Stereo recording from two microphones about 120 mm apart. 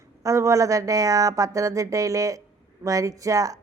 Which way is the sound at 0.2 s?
25° right (ahead or behind).